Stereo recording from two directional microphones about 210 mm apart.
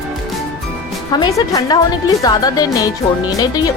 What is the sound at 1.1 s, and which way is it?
A woman's voice, 20° left (ahead or behind).